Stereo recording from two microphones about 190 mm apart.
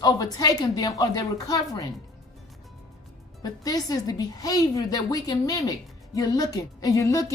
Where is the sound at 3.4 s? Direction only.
20° left (ahead or behind).